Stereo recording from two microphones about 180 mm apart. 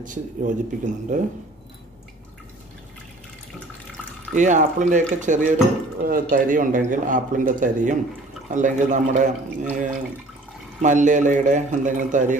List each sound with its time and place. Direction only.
0.0 s speech: 45° right (ahead or behind)
3.9 s drip: 5° left (ahead or behind)
4.4 s speech: 45° right (ahead or behind)
10.8 s speech: 45° right (ahead or behind)